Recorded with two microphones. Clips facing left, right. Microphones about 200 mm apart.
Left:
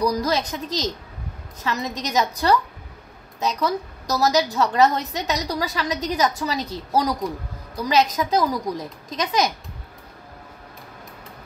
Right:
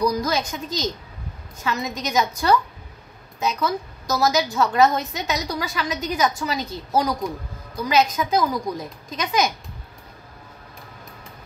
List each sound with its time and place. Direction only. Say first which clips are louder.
0.0 s a woman's voice: even; 35° left (ahead or behind)